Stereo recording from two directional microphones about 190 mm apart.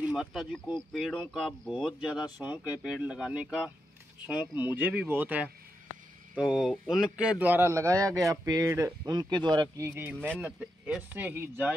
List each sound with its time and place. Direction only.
0.0 s a man's voice: centre (ahead or behind)
10.1 s a man's voice: 5° left (ahead or behind); by 11.7 s 10° right (ahead or behind)